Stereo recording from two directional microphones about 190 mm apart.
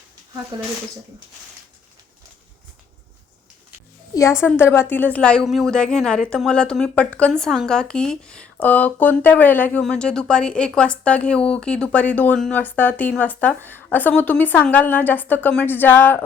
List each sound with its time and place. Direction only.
0.5 s speech: 25° right (ahead or behind)
4.1 s a woman's voice: 15° left (ahead or behind)